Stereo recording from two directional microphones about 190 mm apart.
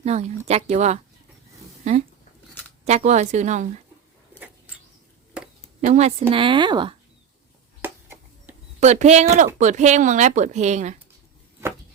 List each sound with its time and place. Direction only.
0.0 s speech: 35° right (ahead or behind)
5.8 s a woman's voice: 35° right (ahead or behind)
7.8 s a sound: 10° right (ahead or behind)
8.8 s speech: 35° right (ahead or behind)